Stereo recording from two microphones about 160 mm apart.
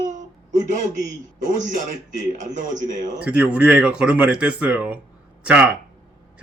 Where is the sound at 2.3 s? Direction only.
55° right (ahead or behind).